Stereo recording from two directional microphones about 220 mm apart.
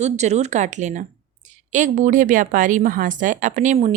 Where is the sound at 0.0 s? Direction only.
30° right (ahead or behind).